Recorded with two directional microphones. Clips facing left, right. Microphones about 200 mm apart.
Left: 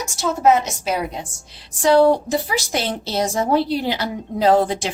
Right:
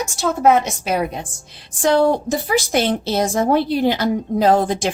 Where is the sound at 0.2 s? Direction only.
55° right (ahead or behind).